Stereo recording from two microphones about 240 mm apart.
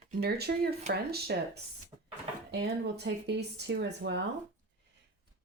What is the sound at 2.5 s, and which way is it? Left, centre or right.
Speech, right.